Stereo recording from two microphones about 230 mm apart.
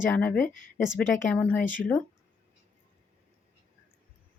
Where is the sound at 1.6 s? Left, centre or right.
Left.